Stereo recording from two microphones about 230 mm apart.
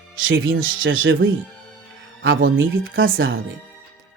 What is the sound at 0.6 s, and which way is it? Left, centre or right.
Speech, right.